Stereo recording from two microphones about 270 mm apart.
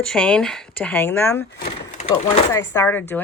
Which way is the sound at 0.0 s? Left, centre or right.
Centre.